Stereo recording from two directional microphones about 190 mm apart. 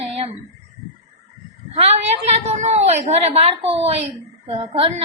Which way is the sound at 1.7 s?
35° right (ahead or behind).